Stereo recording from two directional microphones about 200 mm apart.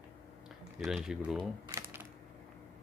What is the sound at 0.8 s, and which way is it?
Speech, 5° right (ahead or behind).